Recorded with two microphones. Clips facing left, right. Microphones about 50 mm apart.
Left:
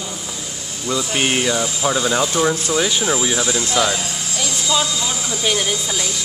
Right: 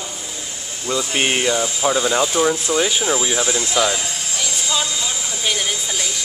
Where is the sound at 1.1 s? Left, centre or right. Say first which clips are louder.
Even; centre.